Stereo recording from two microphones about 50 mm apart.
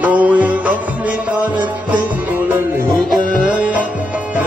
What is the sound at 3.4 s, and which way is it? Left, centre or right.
Music, right.